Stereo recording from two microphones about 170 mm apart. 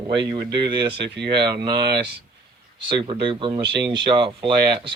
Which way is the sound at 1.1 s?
75° right (ahead or behind).